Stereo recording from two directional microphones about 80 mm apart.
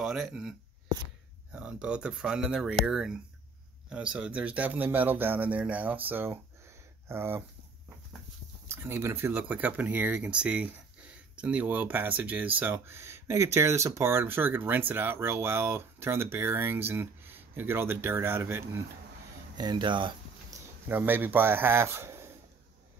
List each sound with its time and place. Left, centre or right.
0.0 s speech: centre; by 6.4 s right
6.6 s a sound: right
8.6 s speech: right
19.5 s speech: right
20.9 s speech: right